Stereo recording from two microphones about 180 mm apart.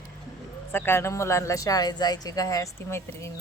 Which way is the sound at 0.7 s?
10° left (ahead or behind).